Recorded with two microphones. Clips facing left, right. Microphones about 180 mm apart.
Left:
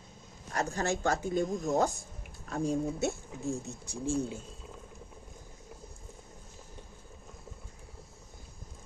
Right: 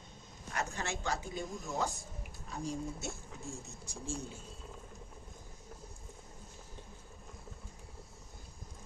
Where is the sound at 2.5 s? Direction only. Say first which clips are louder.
Left 8 dB; 60° left (ahead or behind).